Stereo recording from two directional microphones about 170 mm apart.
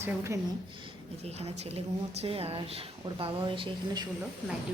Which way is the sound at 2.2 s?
35° right (ahead or behind).